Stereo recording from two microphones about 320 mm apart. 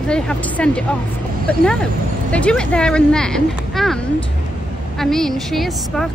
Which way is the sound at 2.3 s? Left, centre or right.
Centre.